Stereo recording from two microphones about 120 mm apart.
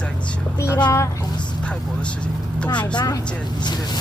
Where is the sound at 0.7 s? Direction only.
35° left (ahead or behind).